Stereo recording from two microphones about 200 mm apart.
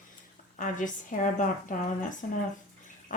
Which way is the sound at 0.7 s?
40° left (ahead or behind).